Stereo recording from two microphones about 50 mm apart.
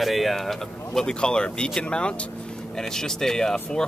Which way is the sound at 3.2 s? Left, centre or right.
Centre.